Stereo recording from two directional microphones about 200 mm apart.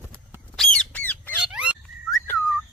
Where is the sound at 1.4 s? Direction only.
5° right (ahead or behind).